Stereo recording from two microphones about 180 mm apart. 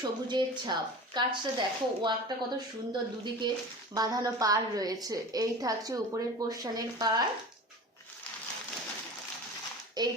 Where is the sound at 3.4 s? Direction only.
25° right (ahead or behind).